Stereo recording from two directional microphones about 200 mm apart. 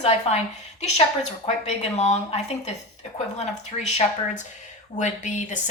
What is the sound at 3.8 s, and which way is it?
A woman's voice, 35° left (ahead or behind).